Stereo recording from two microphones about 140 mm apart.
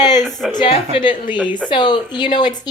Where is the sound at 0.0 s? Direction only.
30° left (ahead or behind).